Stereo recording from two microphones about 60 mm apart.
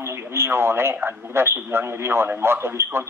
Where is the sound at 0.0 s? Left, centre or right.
Right.